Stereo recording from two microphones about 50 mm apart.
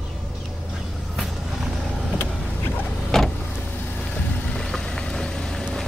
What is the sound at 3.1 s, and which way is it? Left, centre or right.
Vehicle, centre.